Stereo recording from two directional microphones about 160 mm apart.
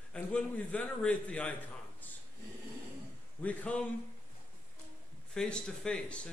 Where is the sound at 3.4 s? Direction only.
10° left (ahead or behind).